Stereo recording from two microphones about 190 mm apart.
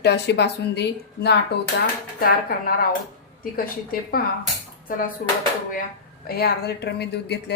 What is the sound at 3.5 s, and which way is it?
A woman's voice, 50° left (ahead or behind).